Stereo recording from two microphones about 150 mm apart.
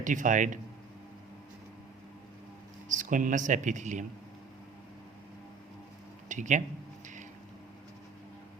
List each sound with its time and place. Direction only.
0.0 s speech: 60° right (ahead or behind)
2.9 s speech: 60° right (ahead or behind)
6.2 s a sound: 55° right (ahead or behind)